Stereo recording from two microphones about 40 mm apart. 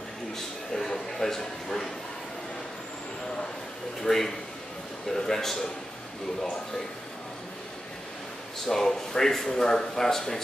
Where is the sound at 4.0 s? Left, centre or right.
Centre.